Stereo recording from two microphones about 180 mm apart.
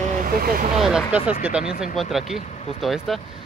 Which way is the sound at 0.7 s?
5° right (ahead or behind).